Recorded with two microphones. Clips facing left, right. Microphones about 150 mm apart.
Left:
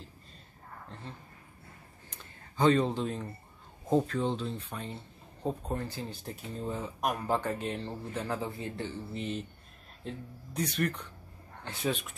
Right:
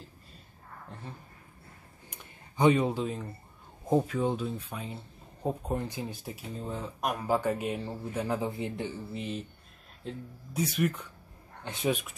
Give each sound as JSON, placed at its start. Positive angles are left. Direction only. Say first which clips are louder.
{"t": 2.0, "sound": "a sound", "louder": "right 2 dB", "side_deg": -15}
{"t": 3.9, "sound": "speech", "louder": "right 1 dB", "side_deg": -10}
{"t": 9.1, "sound": "speech", "louder": "even", "side_deg": 0}
{"t": 11.6, "sound": "speech", "louder": "right 3 dB", "side_deg": -20}